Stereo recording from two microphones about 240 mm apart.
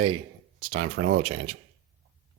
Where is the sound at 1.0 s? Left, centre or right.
Right.